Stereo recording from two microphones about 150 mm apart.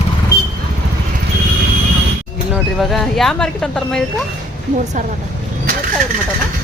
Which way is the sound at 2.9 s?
Centre (ahead or behind).